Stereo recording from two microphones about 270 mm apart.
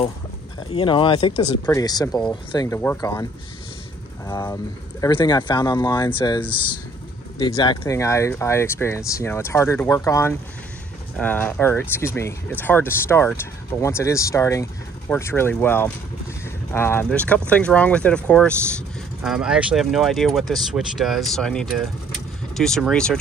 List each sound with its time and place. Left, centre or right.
0.7 s speech: centre
4.3 s speech: centre
6.5 s speech: centre
7.3 s speech: centre